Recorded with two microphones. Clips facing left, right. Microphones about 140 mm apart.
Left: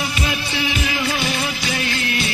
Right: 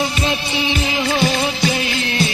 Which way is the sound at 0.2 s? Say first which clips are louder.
Right 3 dB; 25° right (ahead or behind).